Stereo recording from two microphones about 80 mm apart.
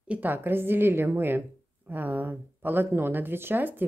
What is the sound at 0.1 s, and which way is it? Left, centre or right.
Speech, right.